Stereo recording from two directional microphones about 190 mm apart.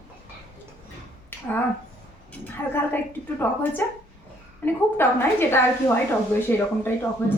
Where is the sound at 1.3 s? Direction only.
10° left (ahead or behind).